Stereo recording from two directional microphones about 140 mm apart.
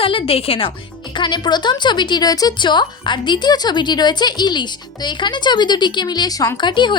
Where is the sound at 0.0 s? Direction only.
40° left (ahead or behind).